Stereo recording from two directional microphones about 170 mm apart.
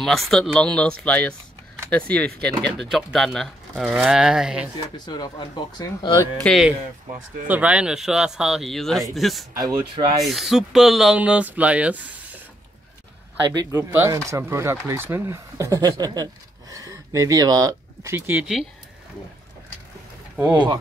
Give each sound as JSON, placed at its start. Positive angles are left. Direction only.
{"t": 0.0, "sound": "speech", "side_deg": 0}
{"t": 4.9, "sound": "speech", "side_deg": 25}
{"t": 6.4, "sound": "speech", "side_deg": 0}
{"t": 9.6, "sound": "speech", "side_deg": -20}
{"t": 10.2, "sound": "speech", "side_deg": 0}
{"t": 13.7, "sound": "speech", "side_deg": -15}
{"t": 20.3, "sound": "speech", "side_deg": -25}